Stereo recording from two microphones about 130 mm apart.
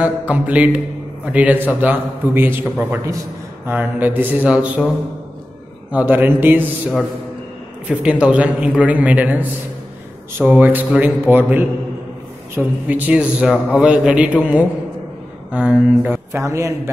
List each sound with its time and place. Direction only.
0.0 s a man's voice: 10° right (ahead or behind)
5.9 s a man's voice: 15° right (ahead or behind)
7.9 s a man's voice: 10° right (ahead or behind)
16.3 s a man's voice: 20° right (ahead or behind)